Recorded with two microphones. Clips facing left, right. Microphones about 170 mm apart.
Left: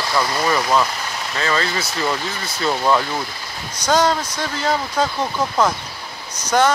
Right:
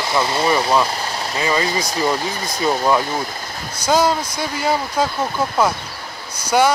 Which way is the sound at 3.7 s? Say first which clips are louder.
Right 1 dB; 10° right (ahead or behind).